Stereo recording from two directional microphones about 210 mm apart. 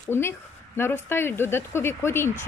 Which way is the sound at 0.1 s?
10° left (ahead or behind).